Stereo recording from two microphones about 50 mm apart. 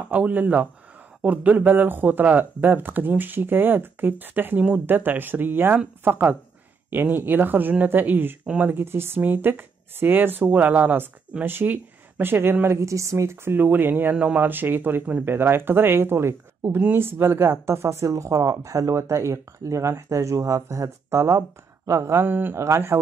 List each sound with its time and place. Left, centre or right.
0.1 s speech: right
9.2 s speech: right
12.6 s speech: right
14.1 s speech: right
14.4 s speech: right
22.2 s speech: right